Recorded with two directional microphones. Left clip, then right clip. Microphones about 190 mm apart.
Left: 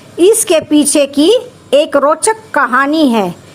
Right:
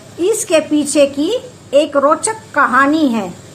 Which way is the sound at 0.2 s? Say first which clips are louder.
Left 5 dB; 50° left (ahead or behind).